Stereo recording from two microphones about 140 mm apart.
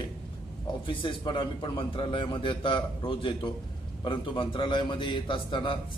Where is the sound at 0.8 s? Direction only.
35° left (ahead or behind).